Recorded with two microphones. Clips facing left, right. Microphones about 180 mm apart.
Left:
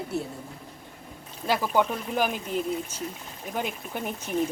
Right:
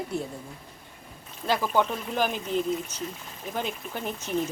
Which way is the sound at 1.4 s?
10° left (ahead or behind).